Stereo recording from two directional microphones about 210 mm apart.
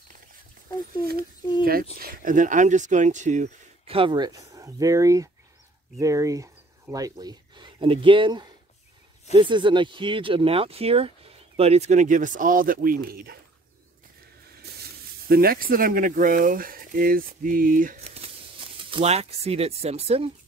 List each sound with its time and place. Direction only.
1.6 s speech: 45° right (ahead or behind)
15.2 s speech: 45° right (ahead or behind); by 20.2 s 30° right (ahead or behind)